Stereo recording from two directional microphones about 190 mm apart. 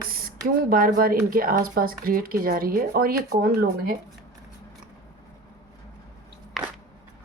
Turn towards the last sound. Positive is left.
turn(degrees=0)  # may be behind; listen again after turning